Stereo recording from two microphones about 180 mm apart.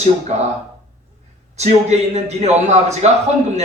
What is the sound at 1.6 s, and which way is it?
A man's voice, 40° right (ahead or behind).